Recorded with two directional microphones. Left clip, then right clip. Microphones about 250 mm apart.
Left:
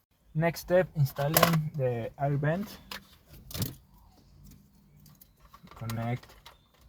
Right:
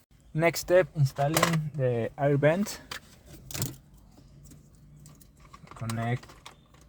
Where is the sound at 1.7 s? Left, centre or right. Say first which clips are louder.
Right 3 dB; right.